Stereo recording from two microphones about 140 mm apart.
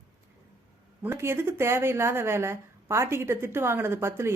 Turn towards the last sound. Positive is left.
turn(degrees=-20)  # may be behind; listen again after turning